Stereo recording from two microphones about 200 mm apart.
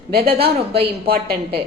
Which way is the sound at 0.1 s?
50° right (ahead or behind).